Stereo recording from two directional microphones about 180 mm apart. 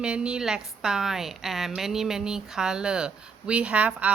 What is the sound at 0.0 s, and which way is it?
A woman's voice, 5° right (ahead or behind).